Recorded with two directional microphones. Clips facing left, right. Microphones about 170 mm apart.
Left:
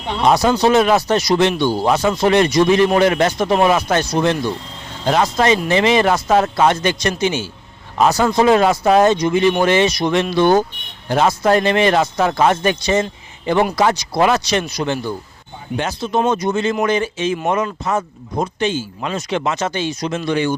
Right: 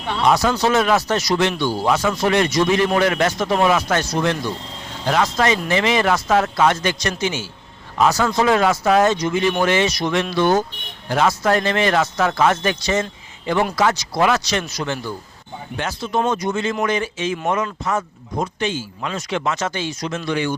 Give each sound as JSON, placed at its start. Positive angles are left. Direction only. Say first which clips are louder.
{"t": 0.1, "sound": "a man's voice", "louder": "left 3 dB", "side_deg": 25}
{"t": 7.9, "sound": "a man's voice", "louder": "left 3 dB", "side_deg": 30}
{"t": 11.9, "sound": "speech", "louder": "left 2 dB", "side_deg": 30}
{"t": 12.5, "sound": "a man's voice", "louder": "left 3 dB", "side_deg": 20}
{"t": 13.0, "sound": "a sound", "louder": "left 4 dB", "side_deg": 30}
{"t": 14.1, "sound": "a man's voice", "louder": "left 3 dB", "side_deg": 25}